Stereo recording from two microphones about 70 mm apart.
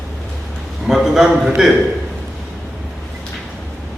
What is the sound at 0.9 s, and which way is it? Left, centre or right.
Speech, centre.